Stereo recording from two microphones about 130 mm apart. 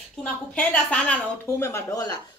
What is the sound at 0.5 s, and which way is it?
Speech, 10° left (ahead or behind).